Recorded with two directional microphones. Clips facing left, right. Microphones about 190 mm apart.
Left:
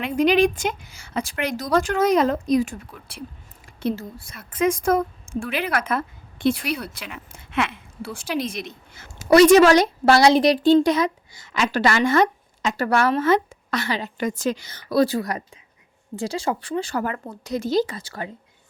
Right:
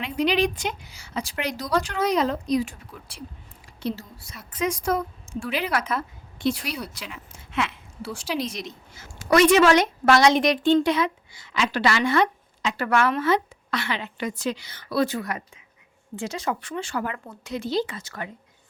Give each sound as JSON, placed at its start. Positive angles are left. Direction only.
{"t": 0.0, "sound": "a woman's voice", "side_deg": 50}
{"t": 9.3, "sound": "a woman's voice", "side_deg": 35}